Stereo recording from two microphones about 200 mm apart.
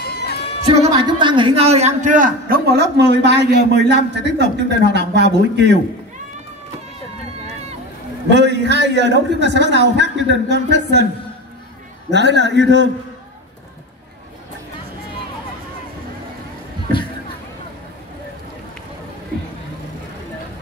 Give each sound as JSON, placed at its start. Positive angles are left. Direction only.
{"t": 0.0, "sound": "music", "side_deg": 55}
{"t": 0.7, "sound": "music", "side_deg": -25}
{"t": 1.2, "sound": "a man's voice", "side_deg": -25}
{"t": 8.3, "sound": "a man's voice", "side_deg": -60}
{"t": 12.1, "sound": "a man's voice", "side_deg": -60}